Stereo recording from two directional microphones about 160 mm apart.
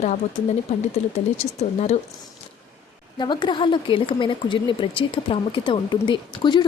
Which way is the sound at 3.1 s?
30° left (ahead or behind).